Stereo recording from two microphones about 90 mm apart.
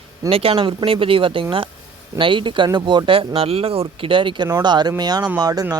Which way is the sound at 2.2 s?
70° right (ahead or behind).